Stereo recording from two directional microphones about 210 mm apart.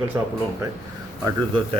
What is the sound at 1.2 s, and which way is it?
Mantra, 25° right (ahead or behind).